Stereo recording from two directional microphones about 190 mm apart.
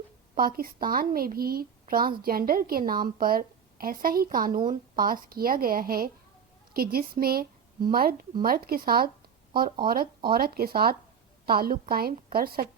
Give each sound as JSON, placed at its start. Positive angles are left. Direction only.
{"t": 0.3, "sound": "a woman's voice", "side_deg": -50}